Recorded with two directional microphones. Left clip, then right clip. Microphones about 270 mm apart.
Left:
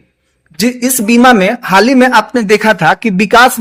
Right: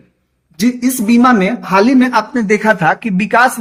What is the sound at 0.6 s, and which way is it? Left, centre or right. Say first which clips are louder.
A man's voice: left 3 dB; left.